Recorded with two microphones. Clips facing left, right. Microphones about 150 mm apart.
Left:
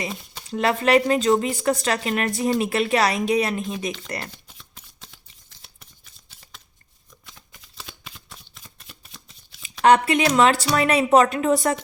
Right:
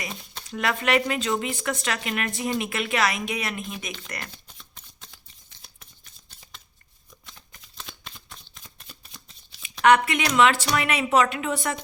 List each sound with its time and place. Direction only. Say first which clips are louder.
0.5 s a woman's voice: left 5 dB; 30° left (ahead or behind)
4.4 s shuffling cards: left 1 dB; centre (ahead or behind)
7.3 s shuffling cards: left 2 dB; 5° left (ahead or behind)
9.8 s a woman's voice: left 3 dB; 30° left (ahead or behind)